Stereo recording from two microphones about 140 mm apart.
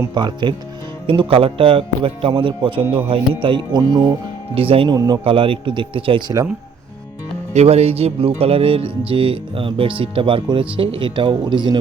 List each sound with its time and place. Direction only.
0.1 s speech: 30° right (ahead or behind)
4.5 s speech: 40° right (ahead or behind)
4.9 s speech: 30° right (ahead or behind)
5.2 s speech: 40° right (ahead or behind)
7.5 s speech: 50° right (ahead or behind)